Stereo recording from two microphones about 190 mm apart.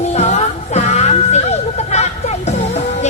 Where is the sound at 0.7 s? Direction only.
35° left (ahead or behind).